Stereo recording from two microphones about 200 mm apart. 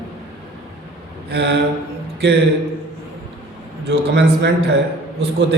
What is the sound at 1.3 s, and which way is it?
Speech, 60° right (ahead or behind).